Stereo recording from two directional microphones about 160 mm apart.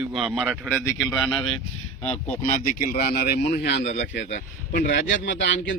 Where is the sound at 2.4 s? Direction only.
55° left (ahead or behind).